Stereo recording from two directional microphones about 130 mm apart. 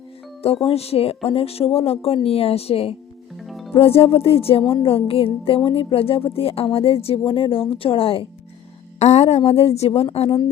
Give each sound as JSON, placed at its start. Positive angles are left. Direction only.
{"t": 0.6, "sound": "a woman's voice", "side_deg": 50}
{"t": 9.0, "sound": "a woman's voice", "side_deg": 55}